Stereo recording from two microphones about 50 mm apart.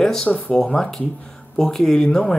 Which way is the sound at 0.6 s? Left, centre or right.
Centre.